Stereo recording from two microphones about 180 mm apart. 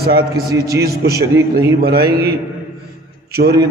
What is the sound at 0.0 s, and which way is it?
Speech, 60° right (ahead or behind).